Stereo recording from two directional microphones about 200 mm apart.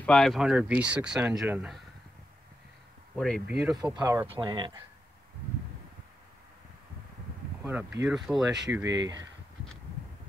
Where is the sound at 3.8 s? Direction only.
20° right (ahead or behind).